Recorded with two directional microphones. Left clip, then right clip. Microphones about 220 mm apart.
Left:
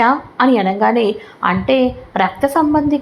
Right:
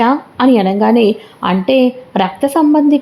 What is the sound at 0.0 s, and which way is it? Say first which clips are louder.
A woman's voice: right 1 dB; 30° right (ahead or behind).